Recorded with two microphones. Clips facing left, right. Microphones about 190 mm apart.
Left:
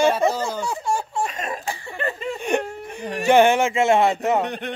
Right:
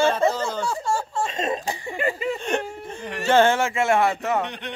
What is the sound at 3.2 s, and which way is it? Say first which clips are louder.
Speech: left 3 dB; 15° left (ahead or behind).